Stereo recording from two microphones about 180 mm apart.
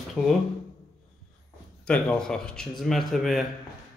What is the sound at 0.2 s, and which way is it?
Speech, 5° left (ahead or behind).